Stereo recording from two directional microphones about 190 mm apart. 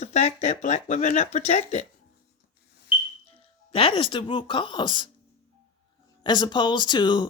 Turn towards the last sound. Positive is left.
turn(degrees=25)  # may be behind; listen again after turning